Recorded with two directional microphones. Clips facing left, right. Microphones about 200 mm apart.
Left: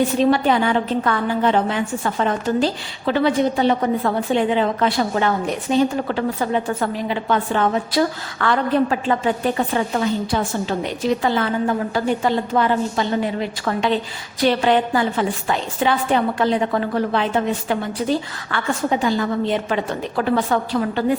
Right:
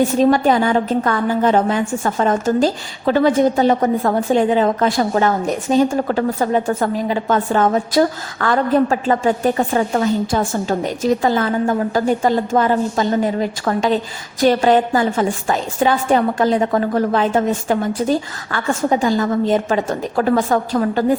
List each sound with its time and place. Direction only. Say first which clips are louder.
0.2 s a woman's voice: right 3 dB; 45° right (ahead or behind)